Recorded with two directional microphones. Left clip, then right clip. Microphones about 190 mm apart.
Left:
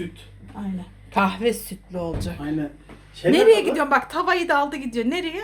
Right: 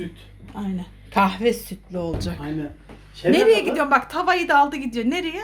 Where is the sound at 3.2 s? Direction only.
Centre (ahead or behind).